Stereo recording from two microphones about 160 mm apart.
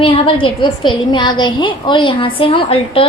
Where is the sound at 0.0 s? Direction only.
35° left (ahead or behind).